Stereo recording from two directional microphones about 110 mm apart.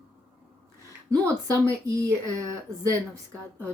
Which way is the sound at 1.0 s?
30° right (ahead or behind).